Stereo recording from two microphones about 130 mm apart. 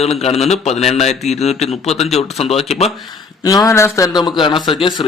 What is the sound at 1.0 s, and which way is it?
Speech, 55° left (ahead or behind).